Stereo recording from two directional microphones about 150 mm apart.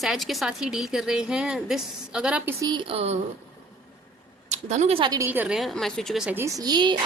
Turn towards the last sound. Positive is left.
turn(degrees=-30)  # may be behind; listen again after turning